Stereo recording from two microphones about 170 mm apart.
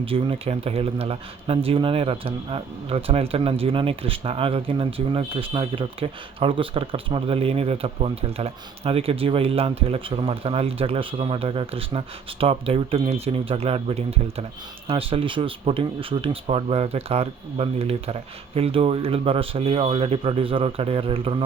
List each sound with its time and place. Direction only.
0.0 s speech: 35° right (ahead or behind)